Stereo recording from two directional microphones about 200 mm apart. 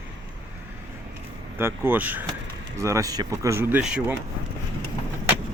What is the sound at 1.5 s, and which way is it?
Speech, 10° right (ahead or behind).